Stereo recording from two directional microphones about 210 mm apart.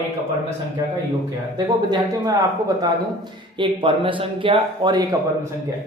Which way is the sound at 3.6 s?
25° right (ahead or behind).